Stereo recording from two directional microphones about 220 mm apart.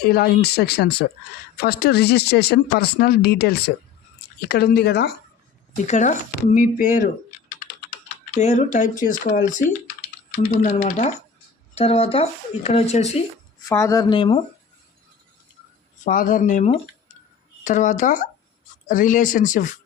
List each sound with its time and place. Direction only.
0.0 s speech: 45° left (ahead or behind)
5.7 s speech: 35° left (ahead or behind)
8.4 s speech: 30° left (ahead or behind)
13.7 s speech: 15° left (ahead or behind)
16.0 s speech: 40° left (ahead or behind)